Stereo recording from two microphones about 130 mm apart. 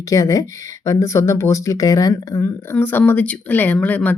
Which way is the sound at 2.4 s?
15° left (ahead or behind).